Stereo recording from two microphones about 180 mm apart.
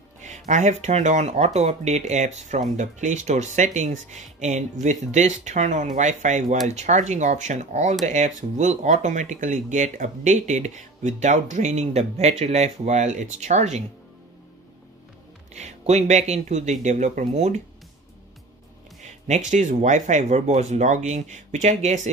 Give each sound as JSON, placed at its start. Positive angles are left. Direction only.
{"t": 0.2, "sound": "speech", "side_deg": -40}
{"t": 15.5, "sound": "speech", "side_deg": -40}
{"t": 19.2, "sound": "speech", "side_deg": -40}